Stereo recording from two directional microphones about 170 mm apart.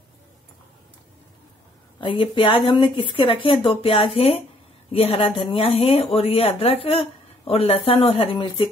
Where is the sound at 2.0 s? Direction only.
30° left (ahead or behind).